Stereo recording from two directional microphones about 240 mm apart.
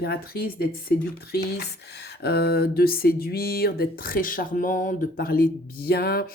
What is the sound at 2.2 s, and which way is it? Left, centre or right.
Speech, left.